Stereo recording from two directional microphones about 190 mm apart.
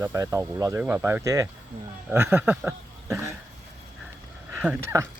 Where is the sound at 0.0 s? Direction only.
15° right (ahead or behind).